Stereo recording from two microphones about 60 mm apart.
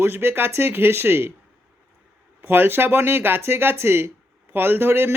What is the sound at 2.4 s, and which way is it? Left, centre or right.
Speech, right.